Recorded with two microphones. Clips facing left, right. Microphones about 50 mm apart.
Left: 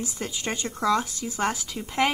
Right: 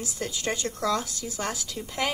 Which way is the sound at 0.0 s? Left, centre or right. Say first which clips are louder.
Even; left.